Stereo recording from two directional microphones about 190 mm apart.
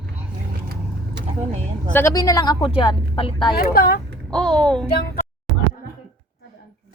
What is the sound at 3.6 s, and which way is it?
Speech, 50° left (ahead or behind).